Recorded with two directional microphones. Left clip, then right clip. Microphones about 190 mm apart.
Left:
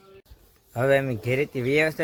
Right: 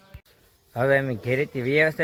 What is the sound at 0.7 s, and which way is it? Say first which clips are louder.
Speech: even; 10° left (ahead or behind).